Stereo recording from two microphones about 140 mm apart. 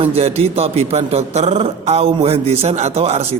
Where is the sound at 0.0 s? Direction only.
45° right (ahead or behind).